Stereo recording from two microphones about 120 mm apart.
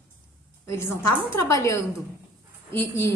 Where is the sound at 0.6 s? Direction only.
20° left (ahead or behind).